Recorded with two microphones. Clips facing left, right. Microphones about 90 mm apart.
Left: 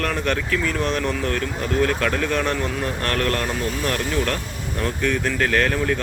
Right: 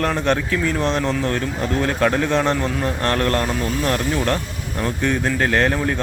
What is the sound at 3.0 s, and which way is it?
Speech, 15° right (ahead or behind).